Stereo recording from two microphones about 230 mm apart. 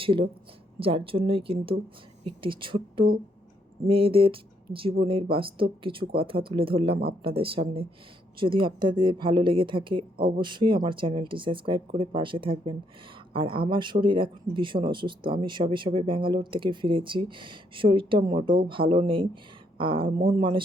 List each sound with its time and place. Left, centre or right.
0.0 s speech: right
18.3 s speech: right
18.7 s speech: right